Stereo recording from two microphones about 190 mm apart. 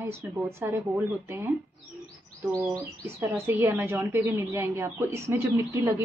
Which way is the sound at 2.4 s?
15° right (ahead or behind).